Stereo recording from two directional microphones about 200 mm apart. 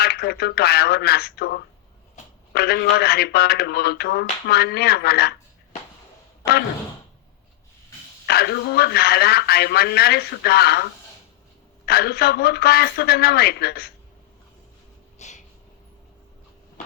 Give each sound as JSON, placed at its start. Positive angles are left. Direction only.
{"t": 0.0, "sound": "speech", "side_deg": 50}
{"t": 8.3, "sound": "speech", "side_deg": 55}
{"t": 11.9, "sound": "speech", "side_deg": 50}
{"t": 15.2, "sound": "a sound", "side_deg": 35}